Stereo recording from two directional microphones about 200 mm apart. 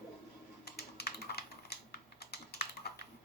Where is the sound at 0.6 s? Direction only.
50° left (ahead or behind).